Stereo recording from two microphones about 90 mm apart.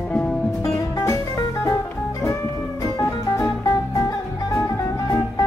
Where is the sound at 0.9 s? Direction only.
35° left (ahead or behind).